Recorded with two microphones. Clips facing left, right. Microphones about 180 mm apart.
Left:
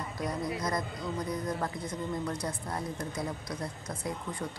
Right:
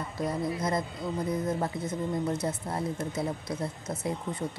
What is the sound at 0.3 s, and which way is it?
Speech, 25° right (ahead or behind).